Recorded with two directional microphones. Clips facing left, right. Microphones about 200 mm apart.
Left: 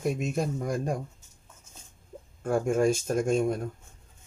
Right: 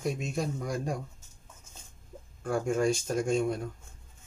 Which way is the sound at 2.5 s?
50° left (ahead or behind).